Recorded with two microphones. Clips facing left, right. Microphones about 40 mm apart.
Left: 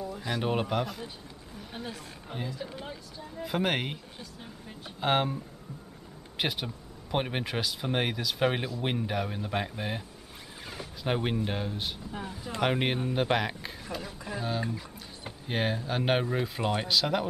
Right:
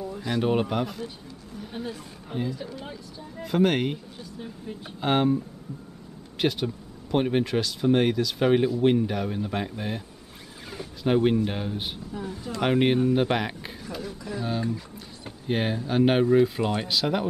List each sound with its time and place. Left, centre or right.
0.0 s speech: centre
12.2 s speech: left
12.6 s speech: centre
13.8 s speech: centre
15.4 s speech: centre